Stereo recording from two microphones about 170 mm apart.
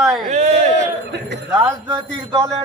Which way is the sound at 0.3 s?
40° right (ahead or behind).